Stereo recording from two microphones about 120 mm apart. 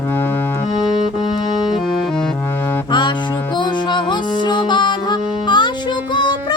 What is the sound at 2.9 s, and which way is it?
Music, 40° left (ahead or behind).